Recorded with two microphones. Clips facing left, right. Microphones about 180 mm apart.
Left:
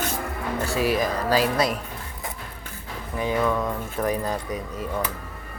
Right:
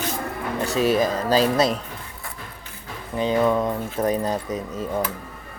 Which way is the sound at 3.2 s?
25° right (ahead or behind).